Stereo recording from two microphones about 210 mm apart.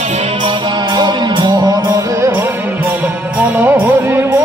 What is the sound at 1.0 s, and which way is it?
Music, 20° right (ahead or behind).